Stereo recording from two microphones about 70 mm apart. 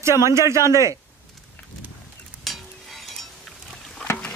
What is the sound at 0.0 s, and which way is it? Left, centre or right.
Speech, right.